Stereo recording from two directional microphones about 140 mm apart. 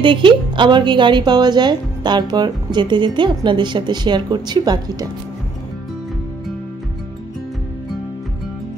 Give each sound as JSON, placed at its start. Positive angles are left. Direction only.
{"t": 0.0, "sound": "speech", "side_deg": -35}